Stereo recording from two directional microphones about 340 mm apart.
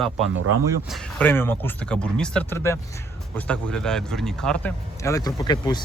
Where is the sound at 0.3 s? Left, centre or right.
Right.